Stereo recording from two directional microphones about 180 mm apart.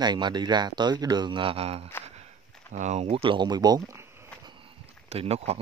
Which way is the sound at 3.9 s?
15° right (ahead or behind).